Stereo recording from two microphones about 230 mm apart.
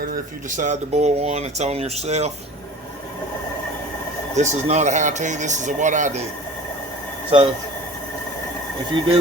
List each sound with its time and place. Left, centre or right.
0.5 s speech: right
4.4 s speech: right
7.3 s speech: right